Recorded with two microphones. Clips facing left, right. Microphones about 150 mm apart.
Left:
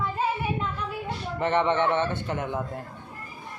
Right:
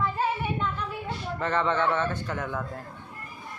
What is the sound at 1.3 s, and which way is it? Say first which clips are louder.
A man's voice: left 3 dB; 20° left (ahead or behind).